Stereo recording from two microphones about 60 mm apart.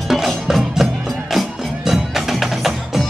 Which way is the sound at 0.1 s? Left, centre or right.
Centre.